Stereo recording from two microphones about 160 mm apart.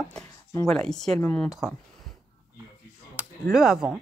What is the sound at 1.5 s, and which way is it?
Speech, 5° right (ahead or behind).